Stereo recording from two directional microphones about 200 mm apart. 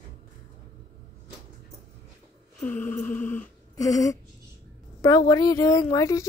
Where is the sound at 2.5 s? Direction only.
10° left (ahead or behind).